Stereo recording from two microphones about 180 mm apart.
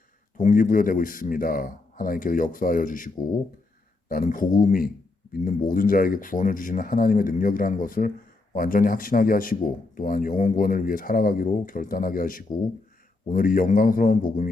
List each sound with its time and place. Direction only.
0.3 s a man's voice: 45° left (ahead or behind)
4.1 s a man's voice: 50° left (ahead or behind)